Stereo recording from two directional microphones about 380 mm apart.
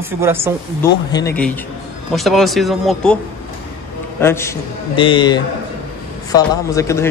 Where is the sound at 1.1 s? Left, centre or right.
Centre.